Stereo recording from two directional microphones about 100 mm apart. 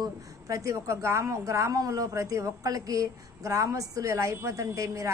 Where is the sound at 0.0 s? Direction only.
30° right (ahead or behind).